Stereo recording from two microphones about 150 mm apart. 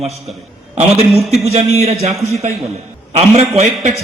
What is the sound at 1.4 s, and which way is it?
A man's voice, 45° right (ahead or behind).